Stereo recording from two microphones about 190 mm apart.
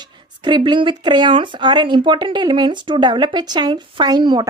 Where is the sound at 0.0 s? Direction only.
25° right (ahead or behind).